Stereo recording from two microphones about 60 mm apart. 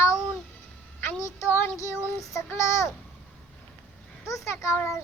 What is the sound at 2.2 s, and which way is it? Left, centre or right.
Speech, left.